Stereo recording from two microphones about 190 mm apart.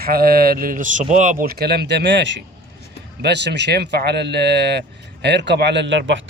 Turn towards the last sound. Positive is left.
turn(degrees=-70)  # may be behind; listen again after turning